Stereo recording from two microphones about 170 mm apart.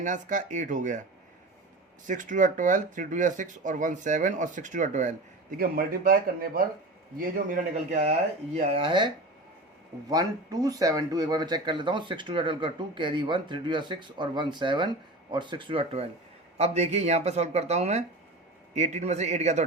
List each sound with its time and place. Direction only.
0.0 s speech: 45° right (ahead or behind)
2.0 s speech: 50° right (ahead or behind)